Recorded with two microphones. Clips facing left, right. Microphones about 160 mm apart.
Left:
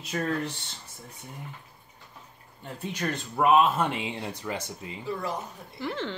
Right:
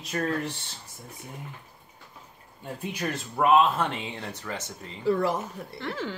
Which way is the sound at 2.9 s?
5° right (ahead or behind).